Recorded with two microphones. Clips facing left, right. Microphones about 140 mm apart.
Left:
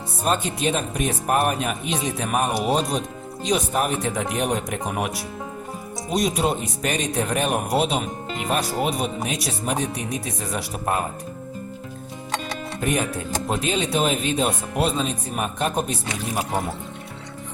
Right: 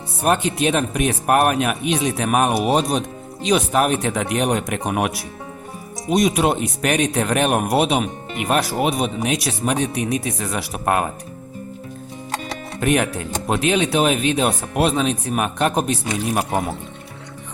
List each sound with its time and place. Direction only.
0.2 s speech: 65° right (ahead or behind)
12.8 s speech: 70° right (ahead or behind)